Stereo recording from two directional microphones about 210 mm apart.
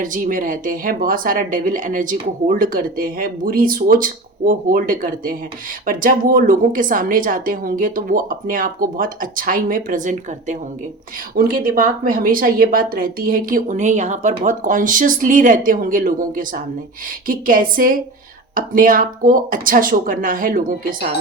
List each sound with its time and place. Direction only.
0.0 s speech: 40° right (ahead or behind)